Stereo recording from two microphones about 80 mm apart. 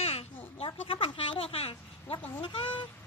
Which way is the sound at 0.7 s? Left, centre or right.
Left.